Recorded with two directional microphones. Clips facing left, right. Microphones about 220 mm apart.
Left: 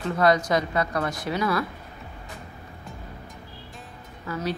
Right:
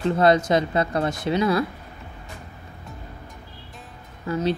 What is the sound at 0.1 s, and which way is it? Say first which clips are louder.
Speech: right 2 dB; 25° right (ahead or behind).